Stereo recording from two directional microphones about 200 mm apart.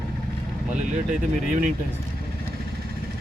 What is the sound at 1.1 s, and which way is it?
Speech, 40° right (ahead or behind).